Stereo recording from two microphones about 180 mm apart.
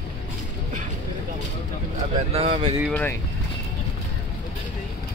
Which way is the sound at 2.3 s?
35° right (ahead or behind).